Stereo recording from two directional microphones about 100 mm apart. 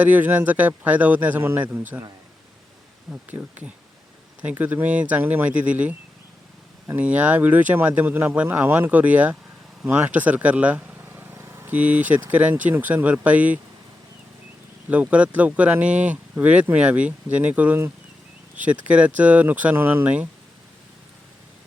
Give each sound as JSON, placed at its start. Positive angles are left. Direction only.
{"t": 0.0, "sound": "speech", "side_deg": -15}
{"t": 3.1, "sound": "speech", "side_deg": -15}
{"t": 7.0, "sound": "speech", "side_deg": -15}
{"t": 14.8, "sound": "speech", "side_deg": -15}